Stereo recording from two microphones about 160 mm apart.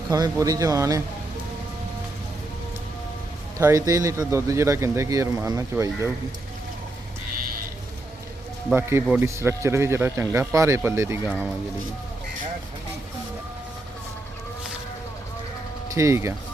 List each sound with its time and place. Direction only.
0.1 s speech: 20° right (ahead or behind)
3.6 s speech: 20° right (ahead or behind)
8.7 s speech: 15° right (ahead or behind)
16.0 s speech: 20° right (ahead or behind)